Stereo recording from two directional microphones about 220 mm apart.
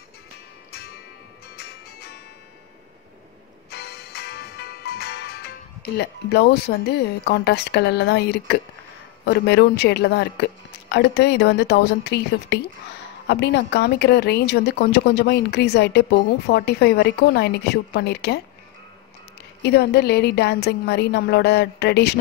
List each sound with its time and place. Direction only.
0.7 s music: 45° left (ahead or behind)
3.7 s music: 45° left (ahead or behind)
9.2 s speech: 50° left (ahead or behind)
19.6 s speech: 50° left (ahead or behind)